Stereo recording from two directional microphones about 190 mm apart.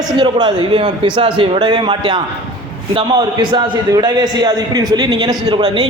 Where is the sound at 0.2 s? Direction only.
25° right (ahead or behind).